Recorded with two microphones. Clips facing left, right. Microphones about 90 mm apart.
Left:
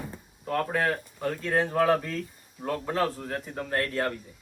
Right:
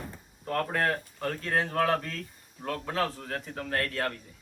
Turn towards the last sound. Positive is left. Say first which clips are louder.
# left 3 dB
turn(degrees=5)  # may be behind; listen again after turning